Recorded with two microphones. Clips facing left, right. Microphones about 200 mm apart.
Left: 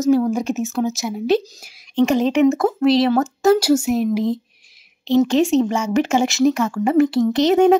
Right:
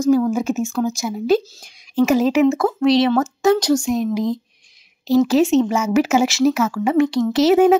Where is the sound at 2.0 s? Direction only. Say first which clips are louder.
Right 1 dB; 5° right (ahead or behind).